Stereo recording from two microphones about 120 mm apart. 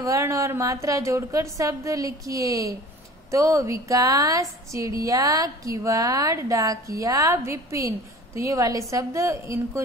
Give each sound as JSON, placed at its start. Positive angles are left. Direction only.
{"t": 0.0, "sound": "a woman's voice", "side_deg": -25}